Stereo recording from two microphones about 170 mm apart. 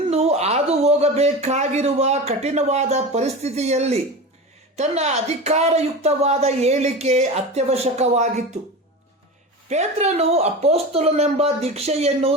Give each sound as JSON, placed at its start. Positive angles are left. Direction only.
{"t": 0.1, "sound": "speech", "side_deg": -40}
{"t": 9.6, "sound": "speech", "side_deg": -40}